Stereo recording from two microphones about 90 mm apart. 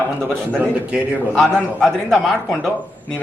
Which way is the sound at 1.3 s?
10° left (ahead or behind).